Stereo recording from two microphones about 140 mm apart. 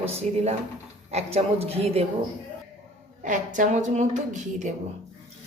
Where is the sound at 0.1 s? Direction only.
50° right (ahead or behind).